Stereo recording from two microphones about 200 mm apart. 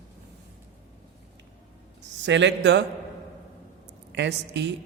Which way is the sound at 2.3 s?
60° right (ahead or behind).